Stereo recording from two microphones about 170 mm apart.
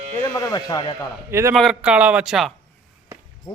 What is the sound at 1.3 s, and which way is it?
Speech, 15° right (ahead or behind).